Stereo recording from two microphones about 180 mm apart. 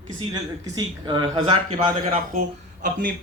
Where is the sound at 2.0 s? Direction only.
45° right (ahead or behind).